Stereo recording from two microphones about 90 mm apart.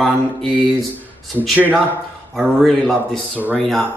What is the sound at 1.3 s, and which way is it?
Speech, 20° right (ahead or behind).